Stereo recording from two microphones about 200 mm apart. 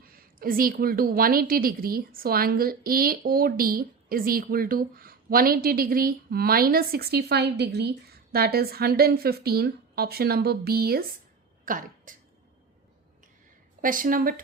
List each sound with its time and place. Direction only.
0.1 s a woman's voice: 45° right (ahead or behind)
11.6 s throat clearing: 45° right (ahead or behind)
13.8 s a woman's voice: 45° right (ahead or behind)